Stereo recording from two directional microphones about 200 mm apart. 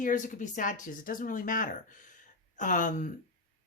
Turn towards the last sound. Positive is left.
turn(degrees=40)  # may be behind; listen again after turning